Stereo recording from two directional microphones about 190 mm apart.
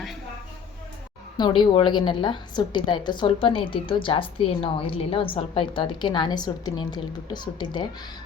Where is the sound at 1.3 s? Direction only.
25° left (ahead or behind).